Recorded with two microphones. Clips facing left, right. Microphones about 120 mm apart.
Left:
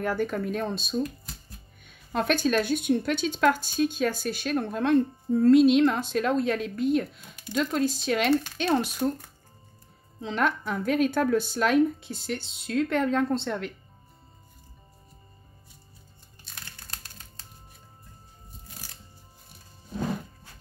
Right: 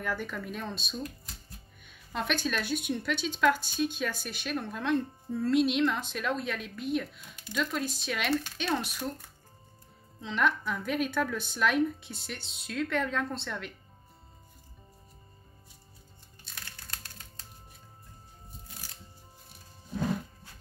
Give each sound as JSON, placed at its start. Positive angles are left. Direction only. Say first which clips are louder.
{"t": 0.0, "sound": "speech", "louder": "left 8 dB", "side_deg": 40}
{"t": 2.1, "sound": "speech", "louder": "left 7 dB", "side_deg": 40}
{"t": 10.2, "sound": "speech", "louder": "left 2 dB", "side_deg": 40}